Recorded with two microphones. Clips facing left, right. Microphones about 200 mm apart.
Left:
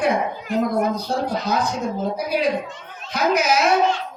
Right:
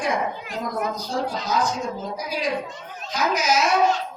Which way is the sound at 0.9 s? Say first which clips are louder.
Left 3 dB; 60° left (ahead or behind).